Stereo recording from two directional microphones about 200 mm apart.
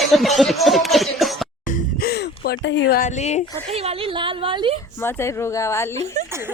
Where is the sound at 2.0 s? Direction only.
50° left (ahead or behind).